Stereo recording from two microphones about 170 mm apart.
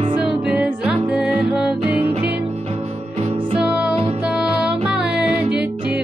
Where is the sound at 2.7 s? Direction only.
40° right (ahead or behind).